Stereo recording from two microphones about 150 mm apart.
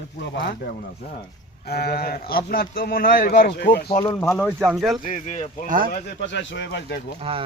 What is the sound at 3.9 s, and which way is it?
Speech, 35° left (ahead or behind).